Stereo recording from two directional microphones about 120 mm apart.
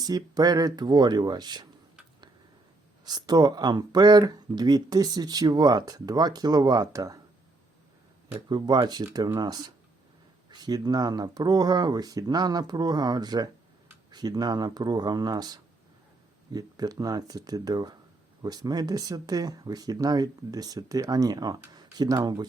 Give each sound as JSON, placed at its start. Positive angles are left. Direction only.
{"t": 0.0, "sound": "speech", "side_deg": -30}
{"t": 3.0, "sound": "speech", "side_deg": -35}
{"t": 8.3, "sound": "speech", "side_deg": -40}